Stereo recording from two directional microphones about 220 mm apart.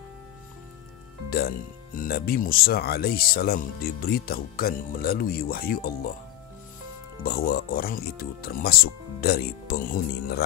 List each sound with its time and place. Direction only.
1.3 s speech: 40° left (ahead or behind)
7.2 s speech: 45° left (ahead or behind)